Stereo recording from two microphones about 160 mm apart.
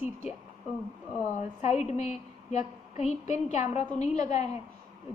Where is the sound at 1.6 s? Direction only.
45° left (ahead or behind).